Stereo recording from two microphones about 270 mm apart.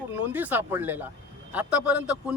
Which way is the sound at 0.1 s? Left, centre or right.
Centre.